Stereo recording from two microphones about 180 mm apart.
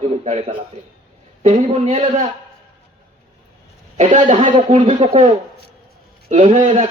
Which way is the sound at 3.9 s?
35° right (ahead or behind).